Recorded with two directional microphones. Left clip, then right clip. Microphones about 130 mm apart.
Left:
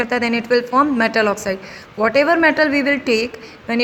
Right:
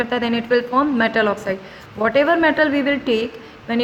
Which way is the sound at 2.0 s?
55° left (ahead or behind).